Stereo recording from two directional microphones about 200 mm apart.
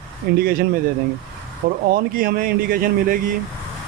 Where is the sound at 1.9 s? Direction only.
45° right (ahead or behind).